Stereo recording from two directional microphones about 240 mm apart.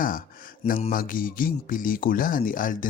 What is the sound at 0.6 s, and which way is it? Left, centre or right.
Speech, left.